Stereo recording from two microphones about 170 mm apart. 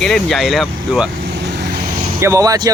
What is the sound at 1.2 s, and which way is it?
Vehicle, 80° right.